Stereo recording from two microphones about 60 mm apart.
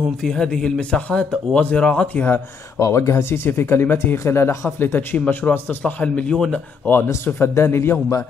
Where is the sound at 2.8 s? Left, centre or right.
Left.